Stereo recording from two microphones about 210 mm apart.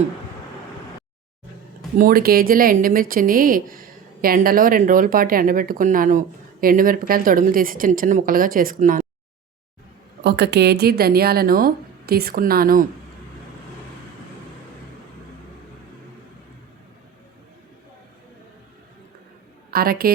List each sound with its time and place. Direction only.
2.0 s speech: 45° right (ahead or behind)
10.2 s a woman's voice: 50° right (ahead or behind)
19.7 s a woman's voice: 45° right (ahead or behind)